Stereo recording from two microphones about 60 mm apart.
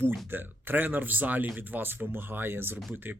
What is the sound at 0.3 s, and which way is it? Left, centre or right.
Speech, right.